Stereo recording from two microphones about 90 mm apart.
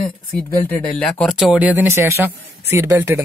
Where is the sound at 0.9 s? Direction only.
10° left (ahead or behind).